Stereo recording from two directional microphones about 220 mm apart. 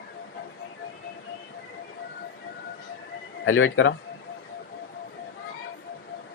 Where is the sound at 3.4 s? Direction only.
65° left (ahead or behind).